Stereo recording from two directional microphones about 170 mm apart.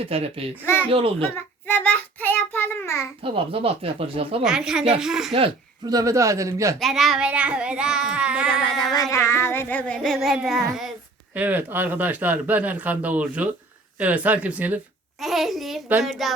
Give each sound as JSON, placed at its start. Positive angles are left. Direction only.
{"t": 0.0, "sound": "speech", "side_deg": -35}
{"t": 0.6, "sound": "child singing", "side_deg": 10}
{"t": 0.9, "sound": "speech", "side_deg": -35}
{"t": 1.6, "sound": "child singing", "side_deg": 10}
{"t": 3.2, "sound": "speech", "side_deg": -30}
{"t": 4.4, "sound": "child singing", "side_deg": -5}
{"t": 5.8, "sound": "speech", "side_deg": -20}
{"t": 6.7, "sound": "child singing", "side_deg": 0}
{"t": 8.9, "sound": "child singing", "side_deg": 20}
{"t": 11.3, "sound": "speech", "side_deg": -10}
{"t": 15.2, "sound": "child singing", "side_deg": 0}